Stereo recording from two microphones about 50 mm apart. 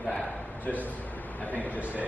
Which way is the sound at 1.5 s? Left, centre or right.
Left.